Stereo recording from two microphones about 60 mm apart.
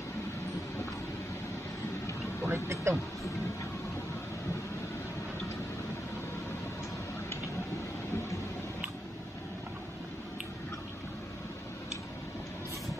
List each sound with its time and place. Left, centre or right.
2.4 s speech: right